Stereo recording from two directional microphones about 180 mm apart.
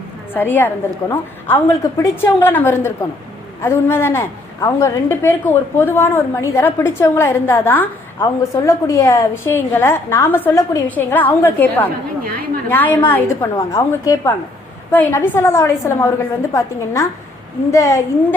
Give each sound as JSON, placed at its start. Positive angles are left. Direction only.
{"t": 0.3, "sound": "a woman's voice", "side_deg": 10}